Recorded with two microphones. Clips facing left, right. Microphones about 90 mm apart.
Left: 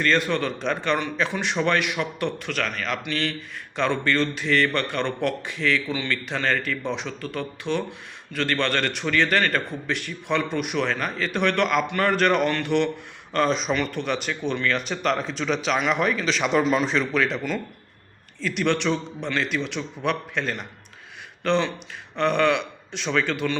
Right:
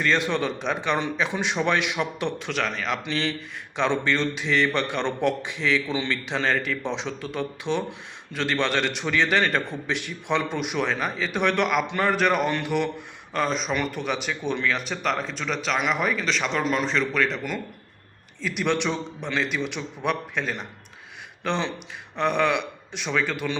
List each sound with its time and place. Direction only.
0.3 s a man's voice: 20° right (ahead or behind); by 13.7 s centre (ahead or behind)
13.7 s a man's voice: 10° right (ahead or behind)